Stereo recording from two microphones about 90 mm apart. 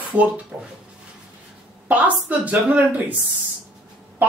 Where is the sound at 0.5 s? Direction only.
10° right (ahead or behind).